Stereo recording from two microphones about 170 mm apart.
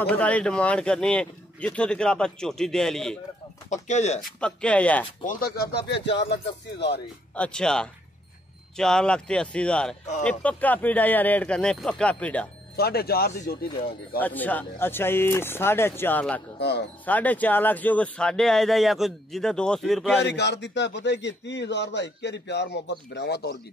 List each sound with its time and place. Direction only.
0.0 s speech: 5° left (ahead or behind)
3.7 s speech: 45° left (ahead or behind)
4.4 s speech: 5° left (ahead or behind)
5.2 s speech: 55° left (ahead or behind); by 7.0 s 80° left
7.3 s speech: 5° left (ahead or behind)
12.7 s speech: 65° left (ahead or behind)
14.2 s speech: 10° left (ahead or behind)
16.5 s speech: 75° left (ahead or behind)
17.0 s speech: 10° left (ahead or behind)
20.2 s a man's voice: 85° left